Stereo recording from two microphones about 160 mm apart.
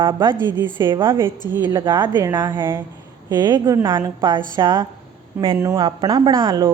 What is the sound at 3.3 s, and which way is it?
A woman's voice, 25° right (ahead or behind).